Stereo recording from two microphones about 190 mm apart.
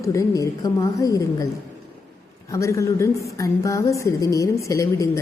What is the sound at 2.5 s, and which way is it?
A woman's voice, 15° left (ahead or behind).